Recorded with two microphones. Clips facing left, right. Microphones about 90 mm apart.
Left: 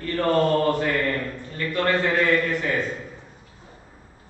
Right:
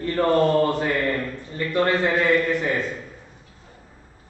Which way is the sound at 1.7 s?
20° right (ahead or behind).